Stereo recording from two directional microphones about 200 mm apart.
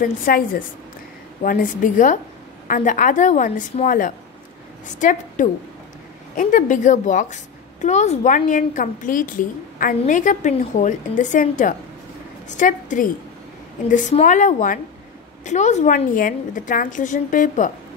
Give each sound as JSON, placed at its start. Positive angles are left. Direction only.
{"t": 0.0, "sound": "a woman's voice", "side_deg": 45}